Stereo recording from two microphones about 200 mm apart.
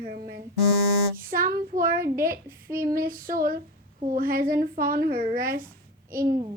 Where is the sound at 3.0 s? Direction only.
45° right (ahead or behind).